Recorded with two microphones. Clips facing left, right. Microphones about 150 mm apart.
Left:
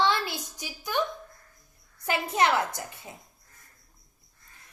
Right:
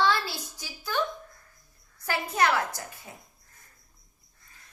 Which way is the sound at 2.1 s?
20° left (ahead or behind).